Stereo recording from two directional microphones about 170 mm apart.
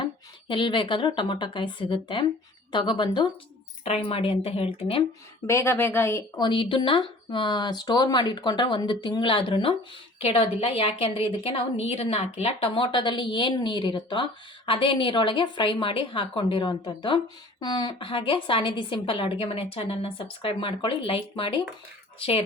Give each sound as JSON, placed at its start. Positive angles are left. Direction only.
{"t": 0.0, "sound": "a woman's voice", "side_deg": 30}
{"t": 5.5, "sound": "a woman's voice", "side_deg": 15}